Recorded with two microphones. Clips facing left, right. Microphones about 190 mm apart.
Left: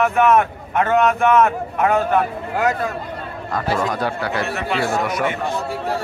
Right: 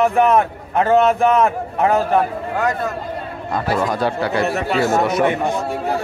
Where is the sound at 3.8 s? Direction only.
25° right (ahead or behind).